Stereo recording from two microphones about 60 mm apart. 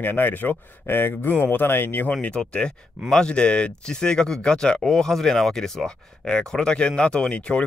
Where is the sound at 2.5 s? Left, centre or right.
Centre.